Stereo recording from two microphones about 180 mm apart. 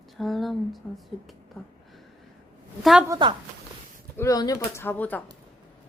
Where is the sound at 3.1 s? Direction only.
25° right (ahead or behind).